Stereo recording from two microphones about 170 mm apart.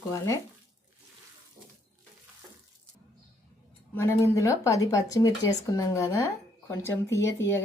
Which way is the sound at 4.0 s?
15° left (ahead or behind).